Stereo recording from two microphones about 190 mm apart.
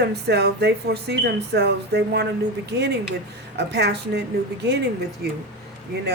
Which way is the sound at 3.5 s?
60° right (ahead or behind).